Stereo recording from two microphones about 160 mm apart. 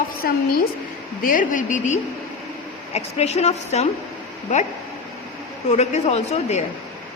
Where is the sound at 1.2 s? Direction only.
55° left (ahead or behind).